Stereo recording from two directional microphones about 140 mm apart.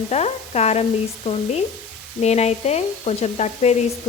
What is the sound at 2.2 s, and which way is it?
Speech, 50° left (ahead or behind).